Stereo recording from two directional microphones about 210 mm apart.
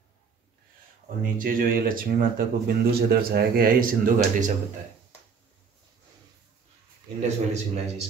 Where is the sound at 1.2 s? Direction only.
40° right (ahead or behind).